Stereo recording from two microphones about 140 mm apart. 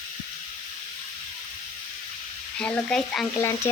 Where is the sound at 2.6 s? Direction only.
5° left (ahead or behind).